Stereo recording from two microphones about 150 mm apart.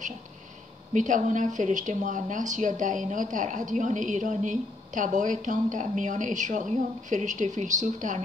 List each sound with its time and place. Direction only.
0.9 s speech: 60° right (ahead or behind)